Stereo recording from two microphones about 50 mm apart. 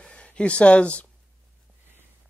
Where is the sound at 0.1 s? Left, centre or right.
Left.